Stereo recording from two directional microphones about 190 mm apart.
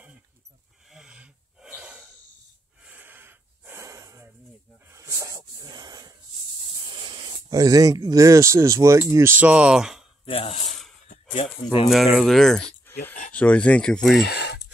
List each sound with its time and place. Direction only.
0.8 s snort: 5° right (ahead or behind)
2.8 s gasp: 10° right (ahead or behind)
4.8 s a sound: 15° right (ahead or behind)
6.9 s speech: 25° right (ahead or behind); by 10.0 s 5° right (ahead or behind)
10.2 s speech: 30° left (ahead or behind)
11.9 s speech: centre (ahead or behind)
12.9 s a sound: 10° left (ahead or behind)
13.3 s speech: 5° left (ahead or behind)
14.2 s a sound: 60° left (ahead or behind)